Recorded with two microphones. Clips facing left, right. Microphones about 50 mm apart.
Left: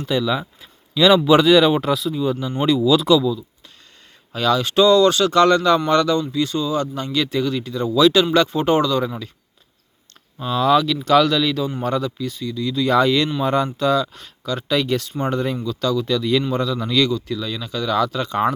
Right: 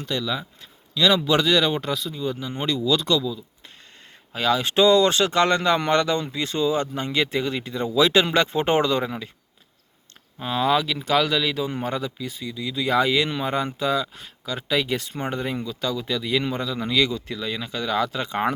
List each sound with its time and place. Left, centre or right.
0.0 s speech: centre
4.3 s speech: centre
10.4 s speech: right
17.1 s speech: right